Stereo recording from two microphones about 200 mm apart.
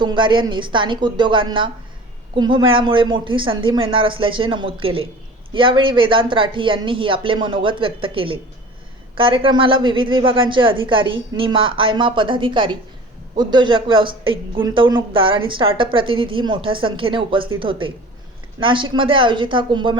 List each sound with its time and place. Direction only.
0.0 s speech: 25° right (ahead or behind)